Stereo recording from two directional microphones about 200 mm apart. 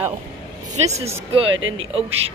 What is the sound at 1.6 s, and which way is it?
Speech, 75° right (ahead or behind).